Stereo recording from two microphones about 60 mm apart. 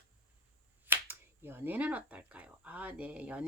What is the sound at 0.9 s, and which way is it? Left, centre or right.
Speech, right.